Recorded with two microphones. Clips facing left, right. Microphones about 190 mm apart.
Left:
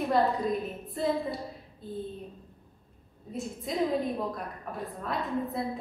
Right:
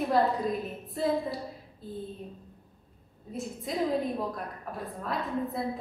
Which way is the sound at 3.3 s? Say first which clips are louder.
Even; centre (ahead or behind).